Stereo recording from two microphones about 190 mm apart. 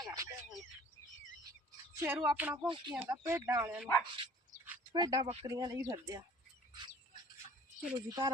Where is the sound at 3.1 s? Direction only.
15° right (ahead or behind).